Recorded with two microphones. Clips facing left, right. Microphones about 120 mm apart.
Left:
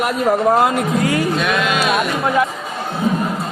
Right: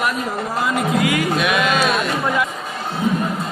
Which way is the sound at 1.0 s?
40° left (ahead or behind).